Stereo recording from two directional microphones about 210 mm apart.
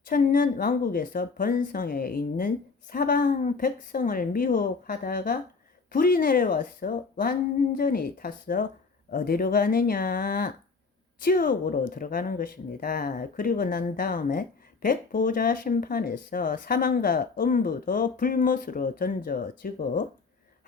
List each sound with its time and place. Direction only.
0.1 s a woman's voice: 40° left (ahead or behind)